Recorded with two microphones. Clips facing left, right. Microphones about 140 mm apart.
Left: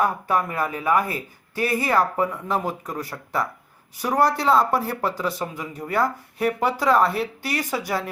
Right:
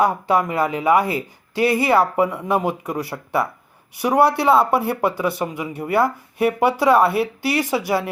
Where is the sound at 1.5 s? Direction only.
75° right (ahead or behind).